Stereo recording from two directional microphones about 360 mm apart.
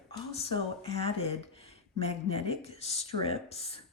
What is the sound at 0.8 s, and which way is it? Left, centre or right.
Speech, centre.